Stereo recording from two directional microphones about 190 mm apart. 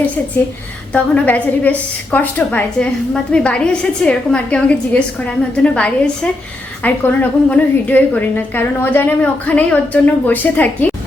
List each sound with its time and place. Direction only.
0.9 s a woman's voice: 5° left (ahead or behind)